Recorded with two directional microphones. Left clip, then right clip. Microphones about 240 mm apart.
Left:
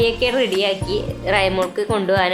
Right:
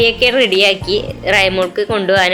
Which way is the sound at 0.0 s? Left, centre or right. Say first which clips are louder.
Right 6 dB; centre.